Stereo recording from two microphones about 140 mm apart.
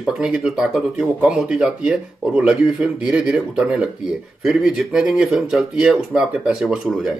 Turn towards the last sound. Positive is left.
turn(degrees=-5)  # may be behind; listen again after turning